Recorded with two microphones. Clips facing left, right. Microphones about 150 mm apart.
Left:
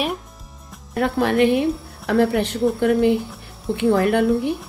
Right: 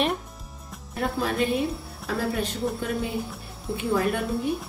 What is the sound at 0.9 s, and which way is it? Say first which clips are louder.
A woman's voice: left 8 dB; 75° left (ahead or behind).